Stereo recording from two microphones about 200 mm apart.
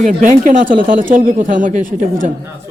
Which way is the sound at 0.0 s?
40° right (ahead or behind).